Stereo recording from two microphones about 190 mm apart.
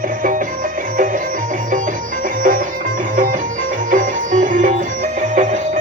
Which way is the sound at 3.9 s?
45° right (ahead or behind).